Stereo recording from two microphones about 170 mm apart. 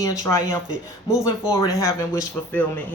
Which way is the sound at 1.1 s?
5° right (ahead or behind).